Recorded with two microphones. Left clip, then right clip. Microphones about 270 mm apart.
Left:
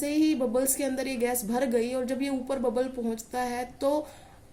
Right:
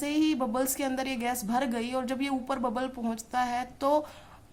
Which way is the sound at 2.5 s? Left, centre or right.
Right.